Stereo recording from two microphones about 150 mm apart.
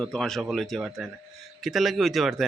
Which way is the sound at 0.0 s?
5° left (ahead or behind).